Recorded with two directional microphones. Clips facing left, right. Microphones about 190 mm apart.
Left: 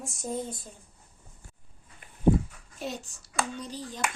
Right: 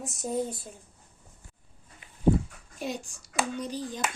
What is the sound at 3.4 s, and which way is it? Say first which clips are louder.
Speech: right 2 dB; 20° right (ahead or behind).